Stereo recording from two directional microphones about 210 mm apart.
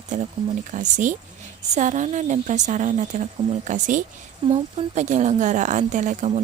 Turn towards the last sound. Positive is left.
turn(degrees=-30)  # may be behind; listen again after turning